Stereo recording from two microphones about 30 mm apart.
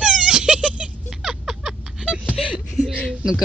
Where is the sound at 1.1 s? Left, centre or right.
Centre.